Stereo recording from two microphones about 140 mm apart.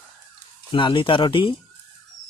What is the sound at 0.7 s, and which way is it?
Speech, 35° left (ahead or behind).